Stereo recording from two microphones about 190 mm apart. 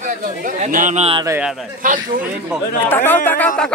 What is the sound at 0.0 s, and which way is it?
Speech, 45° right (ahead or behind).